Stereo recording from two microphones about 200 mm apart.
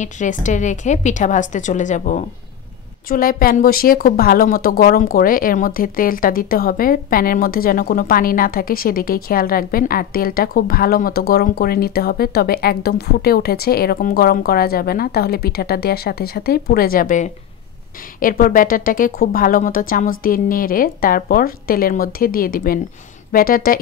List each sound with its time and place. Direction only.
0.0 s a woman's voice: 40° left (ahead or behind)